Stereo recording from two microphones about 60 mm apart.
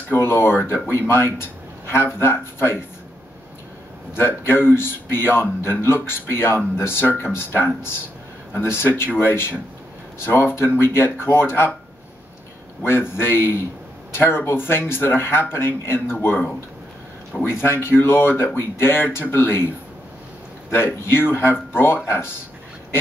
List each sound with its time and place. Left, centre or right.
0.1 s a man's voice: left
4.1 s a man's voice: left
12.8 s a man's voice: left
17.3 s speech: centre
17.6 s a man's voice: left
20.7 s a man's voice: left